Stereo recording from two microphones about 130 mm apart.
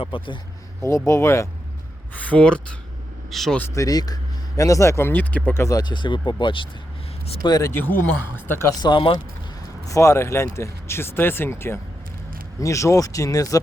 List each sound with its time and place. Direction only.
0.0 s speech: 40° left (ahead or behind)
0.8 s speech: 25° left (ahead or behind)
2.1 s speech: 10° left (ahead or behind)
3.8 s speech: 30° left (ahead or behind); by 5.6 s 15° left (ahead or behind)
5.6 s speech: 30° left (ahead or behind)
8.8 s speech: 40° left (ahead or behind)
9.8 s speech: 25° left (ahead or behind)